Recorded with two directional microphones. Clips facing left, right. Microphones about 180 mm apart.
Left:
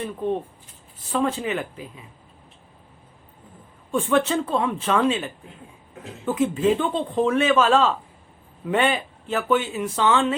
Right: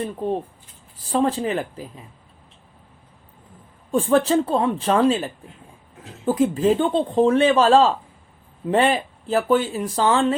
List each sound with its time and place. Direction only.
0.0 s speech: 35° right (ahead or behind)
3.9 s speech: 35° right (ahead or behind)